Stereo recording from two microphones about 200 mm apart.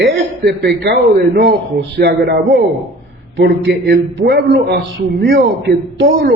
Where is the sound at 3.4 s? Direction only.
55° right (ahead or behind).